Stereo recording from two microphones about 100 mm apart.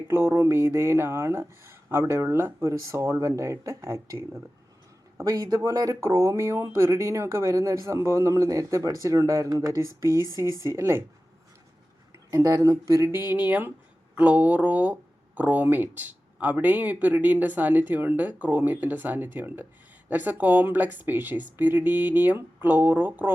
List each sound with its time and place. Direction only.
0.1 s speech: 25° right (ahead or behind)
12.3 s speech: 35° right (ahead or behind)
13.1 s speech: 20° right (ahead or behind)